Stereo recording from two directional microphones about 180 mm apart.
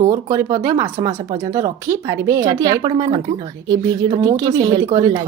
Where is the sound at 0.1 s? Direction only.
20° right (ahead or behind).